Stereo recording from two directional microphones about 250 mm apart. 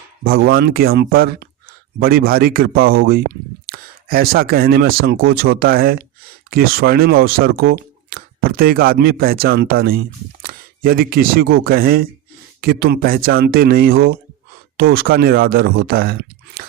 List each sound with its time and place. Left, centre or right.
0.3 s speech: right